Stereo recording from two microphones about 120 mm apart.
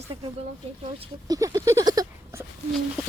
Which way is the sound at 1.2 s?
30° right (ahead or behind).